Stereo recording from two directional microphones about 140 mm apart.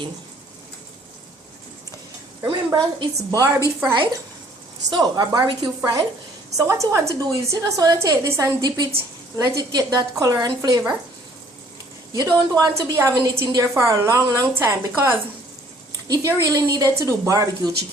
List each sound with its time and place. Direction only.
2.7 s a woman's voice: 30° right (ahead or behind)
12.1 s a woman's voice: 25° right (ahead or behind)